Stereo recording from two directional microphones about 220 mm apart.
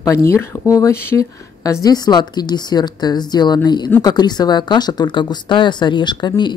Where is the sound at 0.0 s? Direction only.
15° left (ahead or behind).